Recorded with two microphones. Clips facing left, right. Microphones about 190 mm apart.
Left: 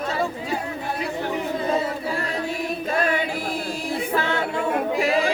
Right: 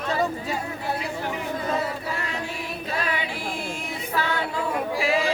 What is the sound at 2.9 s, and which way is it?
Singing, 50° left (ahead or behind).